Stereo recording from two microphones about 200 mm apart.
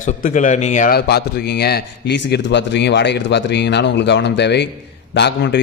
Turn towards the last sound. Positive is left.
turn(degrees=60)  # may be behind; listen again after turning